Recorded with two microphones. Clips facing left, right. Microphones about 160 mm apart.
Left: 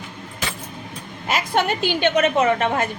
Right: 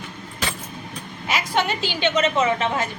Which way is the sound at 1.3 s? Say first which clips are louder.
Left 2 dB; 50° left (ahead or behind).